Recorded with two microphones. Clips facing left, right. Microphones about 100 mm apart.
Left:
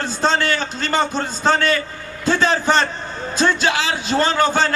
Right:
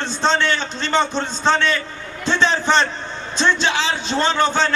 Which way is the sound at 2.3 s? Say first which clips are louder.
Left 1 dB; 45° left (ahead or behind).